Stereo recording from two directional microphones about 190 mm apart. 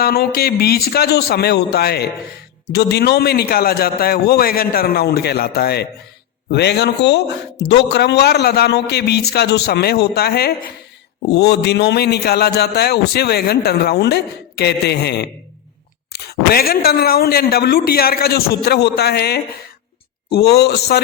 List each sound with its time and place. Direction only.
0.0 s a man's voice: 55° left (ahead or behind)